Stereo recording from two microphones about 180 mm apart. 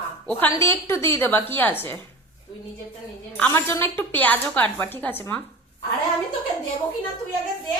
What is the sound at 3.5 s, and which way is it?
A woman's voice, 15° left (ahead or behind).